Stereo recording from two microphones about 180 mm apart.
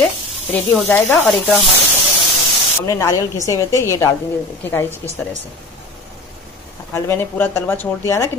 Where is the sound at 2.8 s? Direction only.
15° left (ahead or behind).